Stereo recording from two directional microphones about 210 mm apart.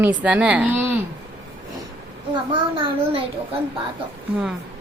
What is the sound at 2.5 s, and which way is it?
Speech, 25° right (ahead or behind).